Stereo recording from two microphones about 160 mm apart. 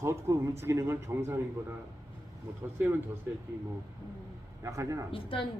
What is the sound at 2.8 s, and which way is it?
Speech, 15° right (ahead or behind).